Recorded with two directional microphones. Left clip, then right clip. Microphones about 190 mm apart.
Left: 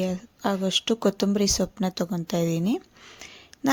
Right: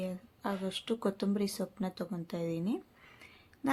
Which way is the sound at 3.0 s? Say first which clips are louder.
Left 11 dB; 40° left (ahead or behind).